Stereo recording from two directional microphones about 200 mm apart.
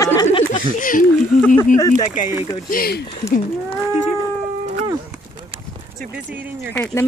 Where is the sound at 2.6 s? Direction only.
50° left (ahead or behind).